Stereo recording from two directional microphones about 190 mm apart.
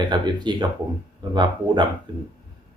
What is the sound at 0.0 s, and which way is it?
Speech, 25° right (ahead or behind).